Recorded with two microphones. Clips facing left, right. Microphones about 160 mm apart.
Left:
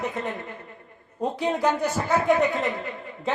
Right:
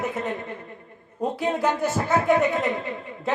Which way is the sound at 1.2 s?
Centre (ahead or behind).